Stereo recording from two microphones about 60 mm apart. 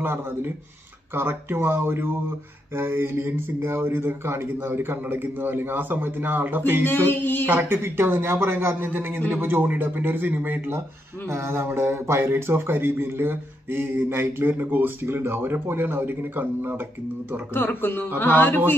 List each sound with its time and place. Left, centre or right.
0.0 s speech: right
7.1 s a man's voice: left
7.4 s speech: right
11.2 s speech: right
17.6 s a man's voice: left